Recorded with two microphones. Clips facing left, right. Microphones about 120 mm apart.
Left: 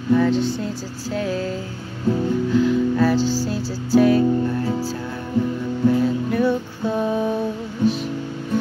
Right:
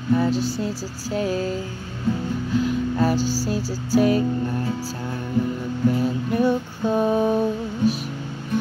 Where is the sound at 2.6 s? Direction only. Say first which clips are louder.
Left 4 dB; 15° right (ahead or behind).